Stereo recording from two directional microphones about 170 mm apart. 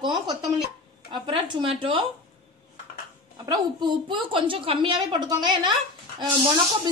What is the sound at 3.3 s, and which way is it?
A woman's voice, 25° right (ahead or behind).